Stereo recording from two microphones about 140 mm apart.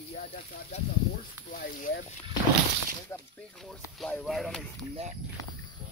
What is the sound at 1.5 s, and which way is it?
Speech, 75° left (ahead or behind).